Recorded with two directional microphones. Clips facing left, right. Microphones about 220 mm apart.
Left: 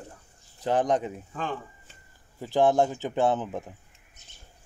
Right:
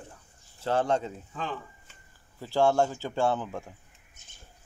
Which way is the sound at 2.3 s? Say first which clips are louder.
Left 2 dB; 20° left (ahead or behind).